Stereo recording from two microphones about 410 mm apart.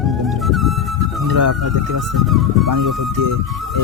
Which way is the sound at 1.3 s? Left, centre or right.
Right.